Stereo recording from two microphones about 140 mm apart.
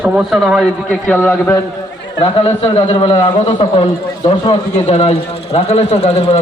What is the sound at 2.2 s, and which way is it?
Speech, 40° left (ahead or behind).